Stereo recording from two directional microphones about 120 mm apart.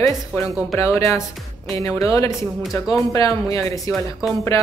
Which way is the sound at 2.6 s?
Centre (ahead or behind).